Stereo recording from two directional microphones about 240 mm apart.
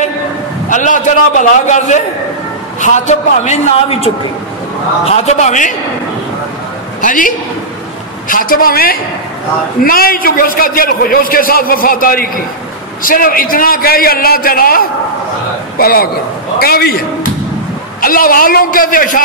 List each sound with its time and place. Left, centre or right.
0.7 s a man's voice: left
5.1 s a man's voice: left
7.0 s a man's voice: left